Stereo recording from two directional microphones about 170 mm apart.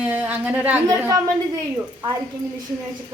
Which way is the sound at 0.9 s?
20° right (ahead or behind).